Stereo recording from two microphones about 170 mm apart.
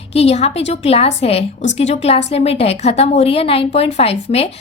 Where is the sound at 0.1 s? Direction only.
35° left (ahead or behind).